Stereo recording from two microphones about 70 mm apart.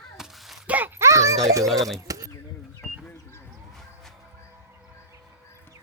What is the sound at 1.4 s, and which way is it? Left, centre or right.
Speech, right.